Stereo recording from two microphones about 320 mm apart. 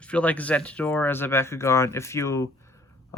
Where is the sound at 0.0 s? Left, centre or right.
Centre.